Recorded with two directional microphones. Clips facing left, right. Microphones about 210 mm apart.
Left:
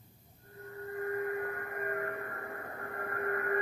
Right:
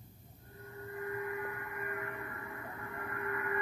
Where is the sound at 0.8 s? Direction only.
45° left (ahead or behind).